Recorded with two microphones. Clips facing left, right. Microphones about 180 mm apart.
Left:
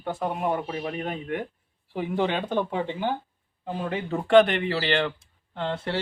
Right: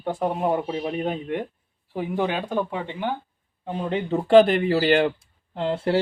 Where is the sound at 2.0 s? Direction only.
10° right (ahead or behind).